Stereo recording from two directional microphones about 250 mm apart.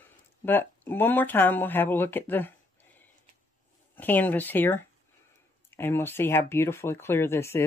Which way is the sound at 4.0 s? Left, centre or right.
Centre.